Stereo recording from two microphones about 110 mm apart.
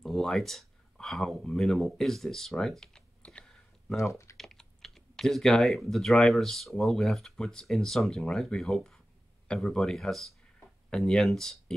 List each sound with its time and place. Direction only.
0.0 s speech: centre (ahead or behind)
4.1 s typing: 25° left (ahead or behind)
4.4 s speech: 5° left (ahead or behind)